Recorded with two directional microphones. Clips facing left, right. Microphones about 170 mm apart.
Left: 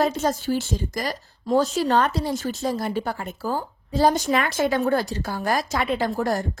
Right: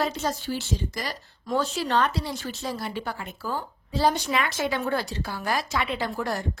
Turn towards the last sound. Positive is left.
turn(degrees=45)  # may be behind; listen again after turning